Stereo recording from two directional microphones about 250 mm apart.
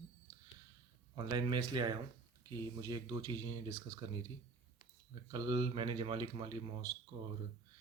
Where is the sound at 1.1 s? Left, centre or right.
Centre.